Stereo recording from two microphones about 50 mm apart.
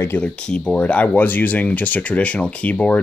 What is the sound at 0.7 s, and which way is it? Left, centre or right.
Speech, left.